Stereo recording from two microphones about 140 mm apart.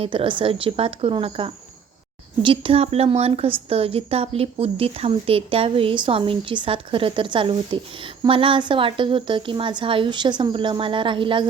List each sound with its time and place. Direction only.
0.0 s a woman's voice: 40° right (ahead or behind)